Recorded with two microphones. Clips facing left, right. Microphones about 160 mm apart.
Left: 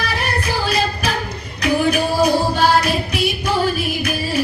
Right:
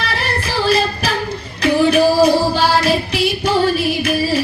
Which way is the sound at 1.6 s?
30° right (ahead or behind).